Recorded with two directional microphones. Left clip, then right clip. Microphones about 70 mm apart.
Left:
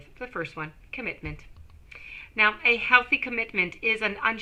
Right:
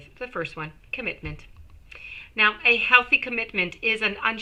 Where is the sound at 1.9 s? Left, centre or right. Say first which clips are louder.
Right 2 dB; left.